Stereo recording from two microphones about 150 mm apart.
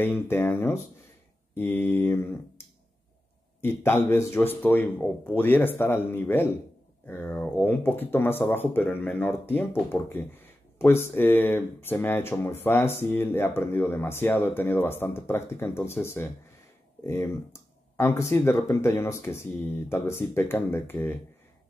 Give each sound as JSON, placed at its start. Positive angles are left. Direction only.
{"t": 0.0, "sound": "speech", "side_deg": 15}
{"t": 3.6, "sound": "speech", "side_deg": 15}